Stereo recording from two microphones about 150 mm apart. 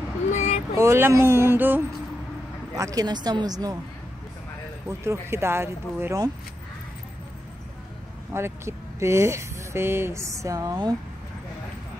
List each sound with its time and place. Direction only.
0.3 s vehicle: 50° left (ahead or behind)
0.7 s speech: 15° right (ahead or behind)
4.8 s speech: 20° right (ahead or behind)
8.3 s speech: 15° right (ahead or behind)